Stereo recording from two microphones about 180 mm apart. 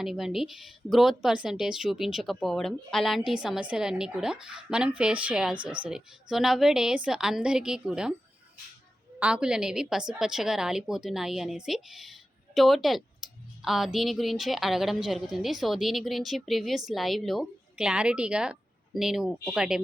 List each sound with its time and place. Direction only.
0.0 s speech: centre (ahead or behind)
9.1 s speech: 5° right (ahead or behind)